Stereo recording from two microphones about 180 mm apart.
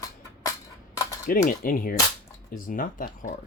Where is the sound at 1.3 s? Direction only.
50° left (ahead or behind).